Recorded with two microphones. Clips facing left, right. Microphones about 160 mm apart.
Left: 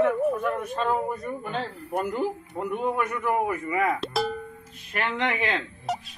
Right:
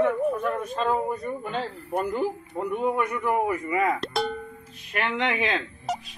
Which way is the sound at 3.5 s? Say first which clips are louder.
Right 1 dB; 15° right (ahead or behind).